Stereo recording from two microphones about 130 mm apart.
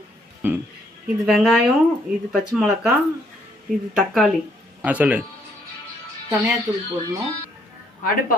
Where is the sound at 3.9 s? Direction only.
Centre (ahead or behind).